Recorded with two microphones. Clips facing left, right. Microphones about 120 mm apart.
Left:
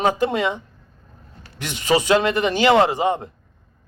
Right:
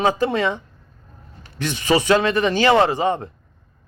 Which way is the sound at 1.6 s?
15° left (ahead or behind).